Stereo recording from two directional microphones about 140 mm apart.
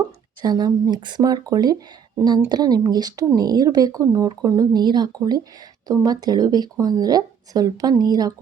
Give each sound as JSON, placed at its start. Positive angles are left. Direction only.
{"t": 0.4, "sound": "speech", "side_deg": -30}